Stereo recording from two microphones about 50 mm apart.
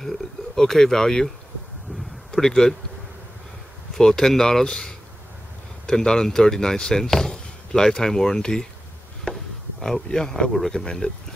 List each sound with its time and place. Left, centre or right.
0.0 s speech: centre
2.3 s speech: centre
3.9 s speech: centre
9.2 s bee: centre
10.7 s speech: centre